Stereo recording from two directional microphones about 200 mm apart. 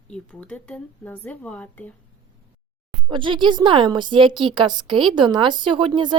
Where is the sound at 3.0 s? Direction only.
25° right (ahead or behind).